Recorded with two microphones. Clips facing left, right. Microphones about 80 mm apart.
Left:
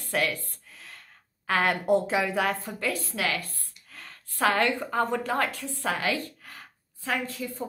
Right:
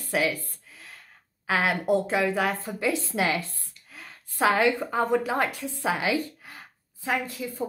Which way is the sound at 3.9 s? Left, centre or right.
Centre.